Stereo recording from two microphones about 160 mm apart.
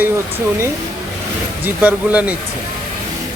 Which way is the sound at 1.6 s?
10° right (ahead or behind).